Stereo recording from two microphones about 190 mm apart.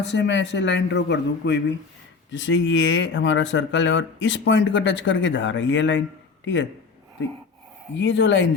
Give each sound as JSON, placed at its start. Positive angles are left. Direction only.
{"t": 0.0, "sound": "a man's voice", "side_deg": 70}
{"t": 7.9, "sound": "speech", "side_deg": 70}